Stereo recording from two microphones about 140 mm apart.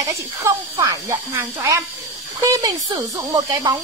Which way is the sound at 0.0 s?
25° right (ahead or behind).